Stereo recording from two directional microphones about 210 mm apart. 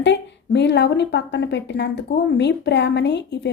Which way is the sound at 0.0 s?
55° left (ahead or behind).